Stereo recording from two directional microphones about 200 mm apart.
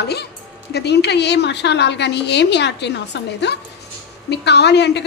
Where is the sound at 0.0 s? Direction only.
55° left (ahead or behind).